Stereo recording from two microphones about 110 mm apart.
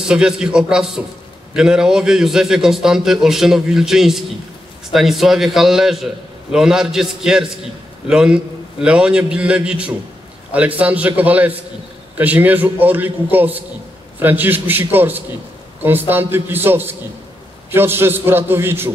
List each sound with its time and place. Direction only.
0.1 s a man's voice: 10° right (ahead or behind)